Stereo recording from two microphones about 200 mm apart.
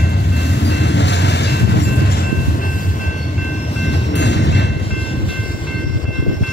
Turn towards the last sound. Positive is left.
turn(degrees=60)  # may be behind; listen again after turning